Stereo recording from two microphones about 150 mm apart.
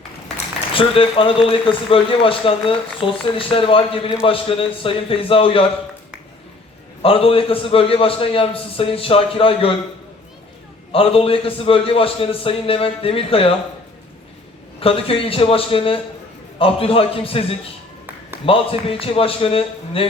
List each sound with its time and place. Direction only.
0.7 s a man's voice: 35° left (ahead or behind)
7.0 s a man's voice: 40° left (ahead or behind)
10.9 s a man's voice: 40° left (ahead or behind)
14.8 s a man's voice: 40° left (ahead or behind)